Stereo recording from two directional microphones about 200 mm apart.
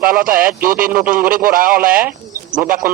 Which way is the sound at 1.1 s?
45° right (ahead or behind).